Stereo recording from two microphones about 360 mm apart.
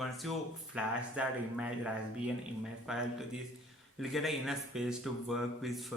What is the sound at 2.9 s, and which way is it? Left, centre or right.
Speech, centre.